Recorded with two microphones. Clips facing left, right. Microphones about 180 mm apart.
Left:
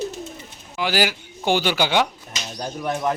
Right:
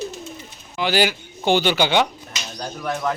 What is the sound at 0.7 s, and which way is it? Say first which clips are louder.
A man's voice: right 2 dB; 5° left (ahead or behind).